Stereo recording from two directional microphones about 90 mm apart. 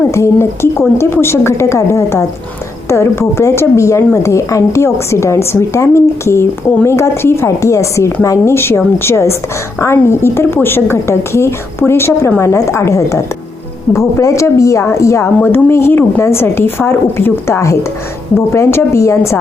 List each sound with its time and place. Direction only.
0.1 s a woman's voice: 30° left (ahead or behind)